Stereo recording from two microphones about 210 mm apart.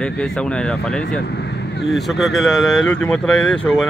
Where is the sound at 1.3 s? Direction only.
55° left (ahead or behind).